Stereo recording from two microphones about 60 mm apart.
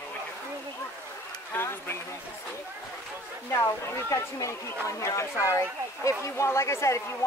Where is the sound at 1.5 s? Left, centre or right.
Left.